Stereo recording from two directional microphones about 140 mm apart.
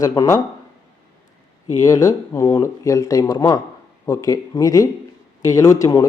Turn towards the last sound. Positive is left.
turn(degrees=25)  # may be behind; listen again after turning